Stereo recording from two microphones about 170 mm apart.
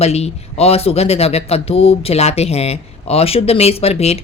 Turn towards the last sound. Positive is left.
turn(degrees=35)  # may be behind; listen again after turning